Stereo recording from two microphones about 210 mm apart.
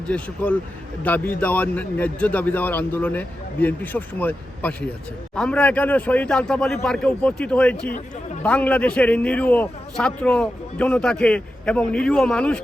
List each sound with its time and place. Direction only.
0.1 s a man's voice: 5° left (ahead or behind)